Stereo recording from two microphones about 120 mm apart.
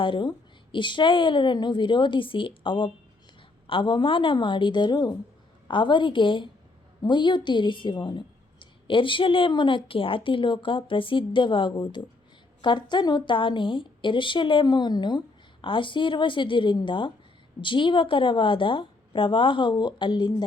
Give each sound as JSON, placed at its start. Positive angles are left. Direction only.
{"t": 0.0, "sound": "a woman's voice", "side_deg": 40}